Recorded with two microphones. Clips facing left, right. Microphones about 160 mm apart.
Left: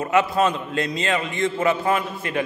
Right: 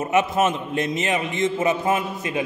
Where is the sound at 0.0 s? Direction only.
20° right (ahead or behind).